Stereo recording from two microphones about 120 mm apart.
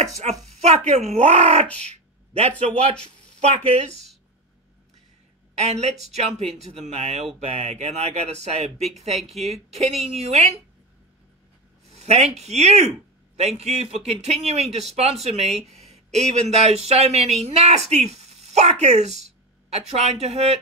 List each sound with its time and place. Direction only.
0.6 s speech: 70° right (ahead or behind)
1.8 s a sound: 60° right (ahead or behind)
2.6 s speech: 55° right (ahead or behind)
5.5 s a woman's voice: 65° right (ahead or behind)
11.9 s speech: 65° right (ahead or behind)